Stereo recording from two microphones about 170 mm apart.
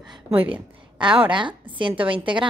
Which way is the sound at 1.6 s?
30° right (ahead or behind).